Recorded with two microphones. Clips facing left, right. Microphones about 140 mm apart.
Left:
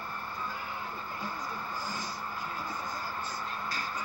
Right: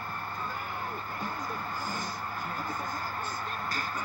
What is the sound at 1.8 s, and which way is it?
Speech, 50° right (ahead or behind).